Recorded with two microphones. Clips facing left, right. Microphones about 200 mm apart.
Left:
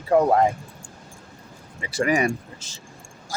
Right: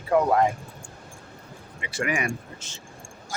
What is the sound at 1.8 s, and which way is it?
Speech, 40° left (ahead or behind).